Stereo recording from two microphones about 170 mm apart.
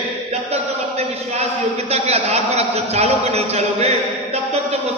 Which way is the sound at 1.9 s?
40° right (ahead or behind).